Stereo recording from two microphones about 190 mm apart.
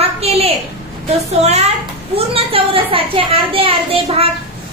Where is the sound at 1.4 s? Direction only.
35° right (ahead or behind).